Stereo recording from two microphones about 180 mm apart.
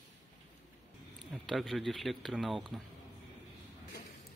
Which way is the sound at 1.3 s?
Centre (ahead or behind).